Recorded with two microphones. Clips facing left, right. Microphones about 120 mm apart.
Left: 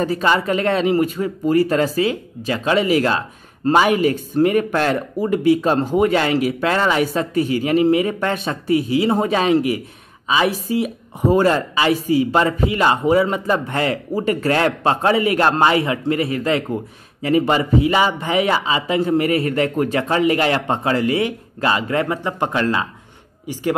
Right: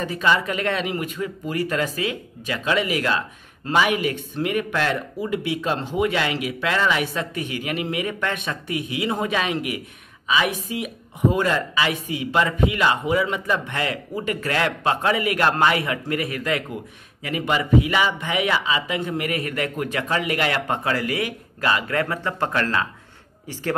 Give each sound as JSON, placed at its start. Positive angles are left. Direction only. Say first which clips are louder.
{"t": 0.0, "sound": "speech", "louder": "left 4 dB", "side_deg": 35}